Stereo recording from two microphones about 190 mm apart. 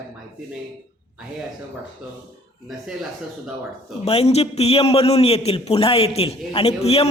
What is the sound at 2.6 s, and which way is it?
Speech, centre (ahead or behind).